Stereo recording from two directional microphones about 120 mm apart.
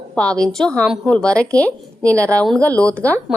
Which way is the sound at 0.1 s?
5° left (ahead or behind).